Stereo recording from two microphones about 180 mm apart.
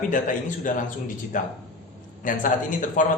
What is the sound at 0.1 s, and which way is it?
Speech, 45° left (ahead or behind).